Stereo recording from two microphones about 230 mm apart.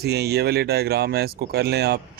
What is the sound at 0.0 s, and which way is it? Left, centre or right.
Speech, right.